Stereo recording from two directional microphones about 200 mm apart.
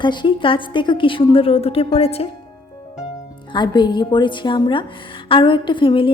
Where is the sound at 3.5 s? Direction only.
20° left (ahead or behind).